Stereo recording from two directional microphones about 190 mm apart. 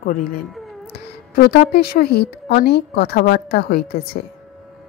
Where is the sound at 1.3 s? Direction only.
55° left (ahead or behind).